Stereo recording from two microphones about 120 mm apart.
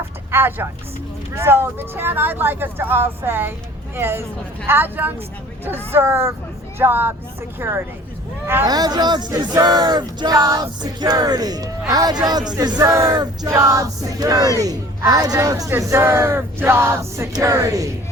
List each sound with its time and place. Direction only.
0.3 s speech: 20° right (ahead or behind)
8.6 s speech: 35° right (ahead or behind)